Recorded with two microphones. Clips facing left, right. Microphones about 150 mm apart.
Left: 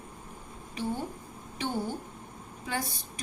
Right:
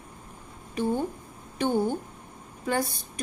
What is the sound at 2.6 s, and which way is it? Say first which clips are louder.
Speech: right 7 dB; 50° right (ahead or behind).